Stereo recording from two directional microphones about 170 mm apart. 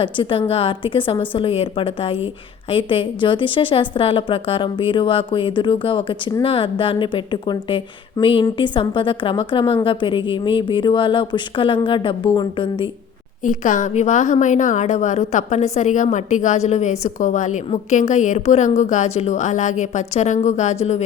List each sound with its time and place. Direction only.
0.0 s a woman's voice: 30° left (ahead or behind)
13.4 s a woman's voice: 50° left (ahead or behind)